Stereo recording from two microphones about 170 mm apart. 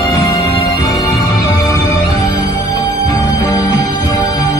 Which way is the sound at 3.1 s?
20° left (ahead or behind).